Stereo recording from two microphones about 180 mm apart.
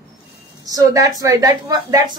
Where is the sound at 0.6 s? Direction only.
20° right (ahead or behind).